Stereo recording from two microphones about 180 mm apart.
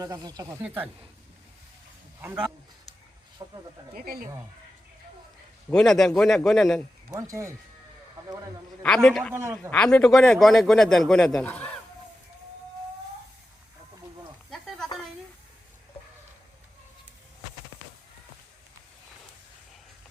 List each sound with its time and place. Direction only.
0.0 s speech: 20° right (ahead or behind)
0.6 s speech: 10° right (ahead or behind)
3.4 s speech: 20° right (ahead or behind)
3.9 s speech: 55° right (ahead or behind)
5.7 s a man's voice: centre (ahead or behind)
7.1 s speech: 20° right (ahead or behind)
8.8 s a man's voice: 5° left (ahead or behind)
9.3 s speech: 15° right (ahead or behind)
9.6 s a man's voice: 5° left (ahead or behind)